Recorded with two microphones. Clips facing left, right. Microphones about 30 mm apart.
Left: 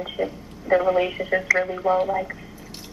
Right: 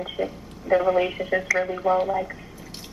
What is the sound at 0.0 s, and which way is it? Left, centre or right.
A woman's voice, centre.